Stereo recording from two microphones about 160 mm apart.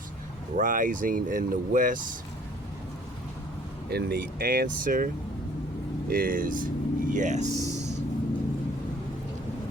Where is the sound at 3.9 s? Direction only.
75° right (ahead or behind); by 7.5 s 50° right (ahead or behind).